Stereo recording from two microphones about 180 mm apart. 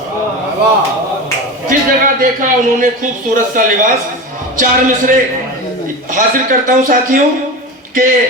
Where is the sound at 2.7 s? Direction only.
45° right (ahead or behind).